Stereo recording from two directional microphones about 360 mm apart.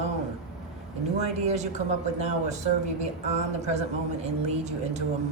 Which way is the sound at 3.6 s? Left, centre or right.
Centre.